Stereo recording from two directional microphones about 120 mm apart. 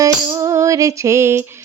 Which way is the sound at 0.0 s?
30° right (ahead or behind).